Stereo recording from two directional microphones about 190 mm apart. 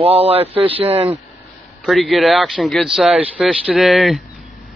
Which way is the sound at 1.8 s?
Centre (ahead or behind).